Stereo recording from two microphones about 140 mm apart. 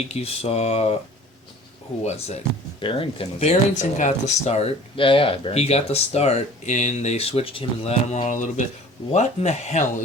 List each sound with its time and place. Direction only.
0.1 s speech: 45° left (ahead or behind)
2.0 s speech: 50° left (ahead or behind)
4.9 s speech: 40° left (ahead or behind)
8.0 s speech: 55° left (ahead or behind)